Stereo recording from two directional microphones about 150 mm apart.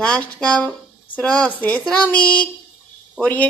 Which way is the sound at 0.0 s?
5° left (ahead or behind).